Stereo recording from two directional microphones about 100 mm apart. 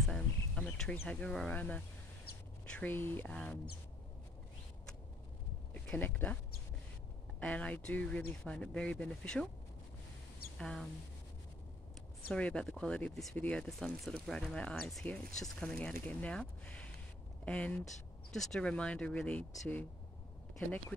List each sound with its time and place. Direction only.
0.0 s a sound: 5° left (ahead or behind)
1.0 s speech: 10° left (ahead or behind)
2.7 s speech: 20° left (ahead or behind)
5.9 s speech: 20° left (ahead or behind)
7.3 s speech: 15° left (ahead or behind)
10.6 s speech: 5° left (ahead or behind)
12.3 s speech: 10° left (ahead or behind)
13.7 s speech: 5° left (ahead or behind)